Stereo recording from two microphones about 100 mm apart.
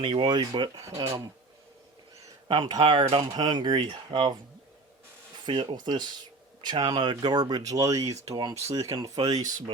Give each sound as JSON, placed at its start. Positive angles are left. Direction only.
{"t": 0.0, "sound": "speech", "side_deg": -60}
{"t": 0.8, "sound": "speech", "side_deg": -40}
{"t": 2.5, "sound": "speech", "side_deg": -45}
{"t": 2.8, "sound": "speech", "side_deg": -60}
{"t": 3.4, "sound": "speech", "side_deg": -50}
{"t": 5.5, "sound": "speech", "side_deg": -50}